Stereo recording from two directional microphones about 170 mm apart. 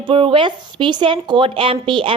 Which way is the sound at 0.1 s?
30° right (ahead or behind).